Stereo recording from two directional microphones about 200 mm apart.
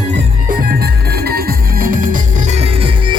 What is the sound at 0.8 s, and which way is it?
Music, 50° right (ahead or behind).